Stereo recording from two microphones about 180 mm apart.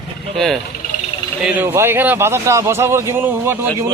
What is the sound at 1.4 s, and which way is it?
Speech, 10° right (ahead or behind).